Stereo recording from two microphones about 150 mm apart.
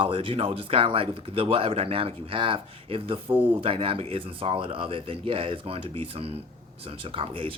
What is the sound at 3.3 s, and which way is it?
Speech, 10° right (ahead or behind).